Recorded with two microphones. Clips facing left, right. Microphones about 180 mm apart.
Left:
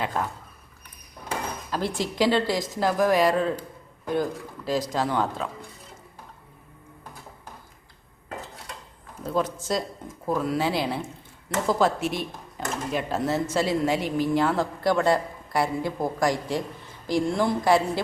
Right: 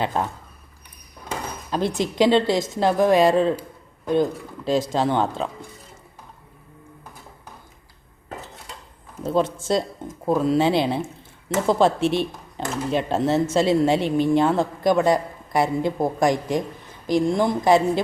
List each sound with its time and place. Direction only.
0.0 s speech: 25° right (ahead or behind)
2.0 s speech: 20° right (ahead or behind)
9.2 s speech: 25° right (ahead or behind)